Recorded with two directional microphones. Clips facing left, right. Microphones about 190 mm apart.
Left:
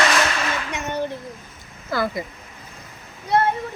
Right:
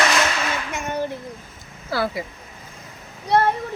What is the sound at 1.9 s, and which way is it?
Speech, 5° right (ahead or behind).